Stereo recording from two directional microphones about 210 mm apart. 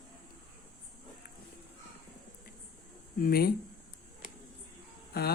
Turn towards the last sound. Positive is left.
turn(degrees=50)  # may be behind; listen again after turning